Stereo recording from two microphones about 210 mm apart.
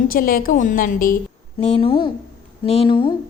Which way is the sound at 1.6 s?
30° left (ahead or behind).